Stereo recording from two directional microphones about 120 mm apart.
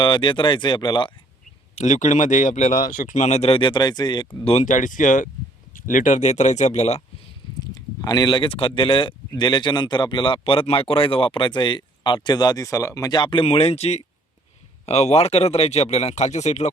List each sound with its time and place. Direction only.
0.0 s speech: 40° left (ahead or behind)
1.7 s speech: 85° left; by 4.3 s 35° left (ahead or behind)
4.4 s speech: 80° left
8.0 s speech: 35° left (ahead or behind); by 16.7 s 70° left (ahead or behind)